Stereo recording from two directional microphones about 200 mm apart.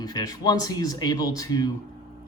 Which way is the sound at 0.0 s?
20° left (ahead or behind).